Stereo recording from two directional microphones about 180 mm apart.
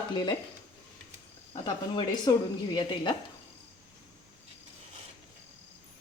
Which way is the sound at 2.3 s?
25° left (ahead or behind).